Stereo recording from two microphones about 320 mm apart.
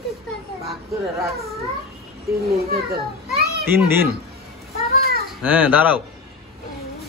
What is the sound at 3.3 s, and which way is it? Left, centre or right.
Children playing, right.